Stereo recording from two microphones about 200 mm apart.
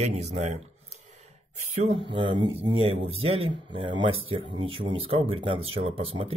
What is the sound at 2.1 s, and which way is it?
Speech, 25° right (ahead or behind).